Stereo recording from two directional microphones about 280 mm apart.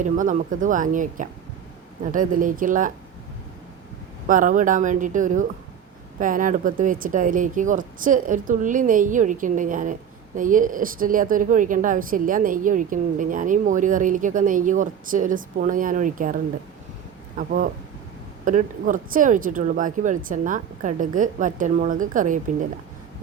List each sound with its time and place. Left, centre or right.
0.0 s speech: right
4.3 s speech: right